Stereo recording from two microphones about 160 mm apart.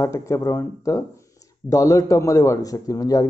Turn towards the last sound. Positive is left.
turn(degrees=20)  # may be behind; listen again after turning